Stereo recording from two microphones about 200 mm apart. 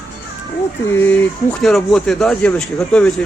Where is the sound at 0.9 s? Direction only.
10° left (ahead or behind).